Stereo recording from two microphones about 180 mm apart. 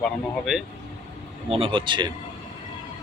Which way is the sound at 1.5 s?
30° right (ahead or behind).